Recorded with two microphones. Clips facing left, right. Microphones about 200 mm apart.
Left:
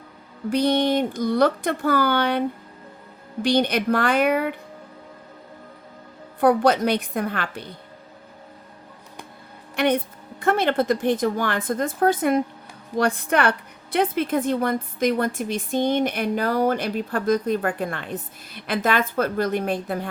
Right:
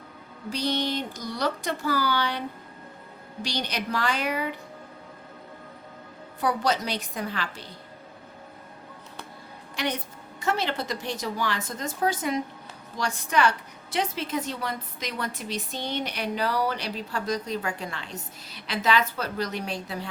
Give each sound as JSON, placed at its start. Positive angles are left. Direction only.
{"t": 0.5, "sound": "speech", "side_deg": 55}
{"t": 3.4, "sound": "speech", "side_deg": 55}
{"t": 6.4, "sound": "speech", "side_deg": 55}
{"t": 9.7, "sound": "a woman's voice", "side_deg": 55}